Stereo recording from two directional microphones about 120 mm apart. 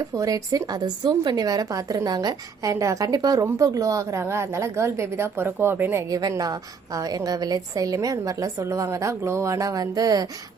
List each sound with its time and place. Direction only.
0.1 s a woman's voice: 30° right (ahead or behind)